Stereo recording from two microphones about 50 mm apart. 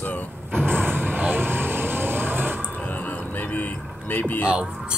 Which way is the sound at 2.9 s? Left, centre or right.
Left.